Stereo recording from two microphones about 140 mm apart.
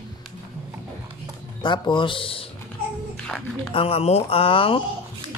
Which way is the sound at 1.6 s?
35° left (ahead or behind).